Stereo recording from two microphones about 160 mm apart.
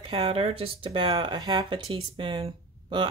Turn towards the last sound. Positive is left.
turn(degrees=-30)  # may be behind; listen again after turning